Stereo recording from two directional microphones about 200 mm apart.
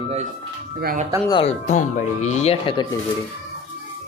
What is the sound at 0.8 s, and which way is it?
Speech, 50° right (ahead or behind).